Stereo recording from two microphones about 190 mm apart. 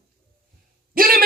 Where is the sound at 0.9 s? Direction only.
50° right (ahead or behind).